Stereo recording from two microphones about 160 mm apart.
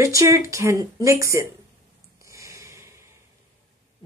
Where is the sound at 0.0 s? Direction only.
20° right (ahead or behind).